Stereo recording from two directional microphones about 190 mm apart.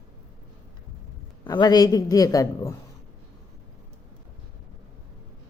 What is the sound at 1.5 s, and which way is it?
A man's voice, 20° left (ahead or behind).